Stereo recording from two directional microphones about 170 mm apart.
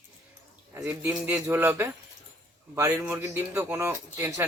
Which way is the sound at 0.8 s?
10° right (ahead or behind).